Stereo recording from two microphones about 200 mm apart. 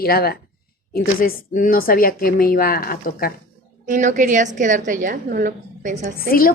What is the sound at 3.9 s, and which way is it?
A woman's voice, 40° right (ahead or behind).